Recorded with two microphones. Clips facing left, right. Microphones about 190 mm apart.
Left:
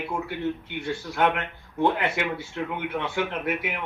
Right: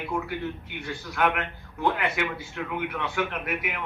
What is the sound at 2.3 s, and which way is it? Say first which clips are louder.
Speech: left 2 dB; 25° left (ahead or behind).